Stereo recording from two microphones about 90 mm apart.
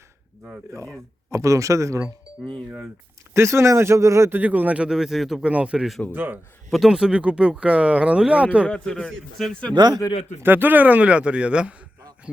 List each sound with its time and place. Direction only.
1.3 s a man's voice: 35° right (ahead or behind)
4.4 s speech: 20° right (ahead or behind); by 5.5 s 5° right (ahead or behind)
5.5 s a man's voice: 15° right (ahead or behind)
6.7 s speech: 5° right (ahead or behind)
8.6 s a man's voice: 10° left (ahead or behind)
9.7 s a man's voice: 50° right (ahead or behind)
10.4 s speech: 20° right (ahead or behind)